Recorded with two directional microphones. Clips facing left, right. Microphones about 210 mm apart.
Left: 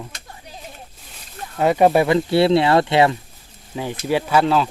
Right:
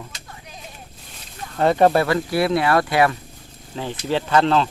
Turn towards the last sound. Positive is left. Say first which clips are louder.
# even
turn(degrees=5)  # may be behind; listen again after turning